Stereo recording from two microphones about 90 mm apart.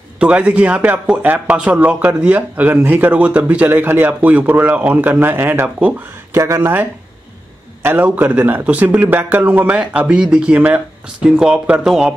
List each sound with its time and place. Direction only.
0.2 s a man's voice: 10° right (ahead or behind)
6.3 s a man's voice: 30° right (ahead or behind); by 12.1 s 5° right (ahead or behind)